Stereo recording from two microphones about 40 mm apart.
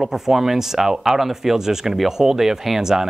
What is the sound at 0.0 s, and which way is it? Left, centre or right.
Speech, centre.